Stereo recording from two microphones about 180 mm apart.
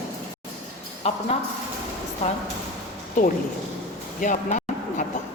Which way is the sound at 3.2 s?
45° left (ahead or behind).